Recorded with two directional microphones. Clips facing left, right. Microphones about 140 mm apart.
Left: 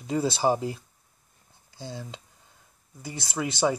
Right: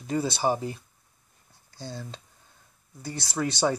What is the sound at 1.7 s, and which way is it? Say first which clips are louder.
Speech: even; 5° left (ahead or behind).